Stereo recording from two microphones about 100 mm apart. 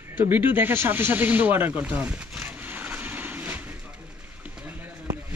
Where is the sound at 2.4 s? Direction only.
20° right (ahead or behind).